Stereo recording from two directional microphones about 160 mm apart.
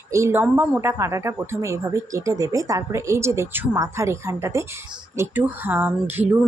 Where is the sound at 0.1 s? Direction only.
15° right (ahead or behind).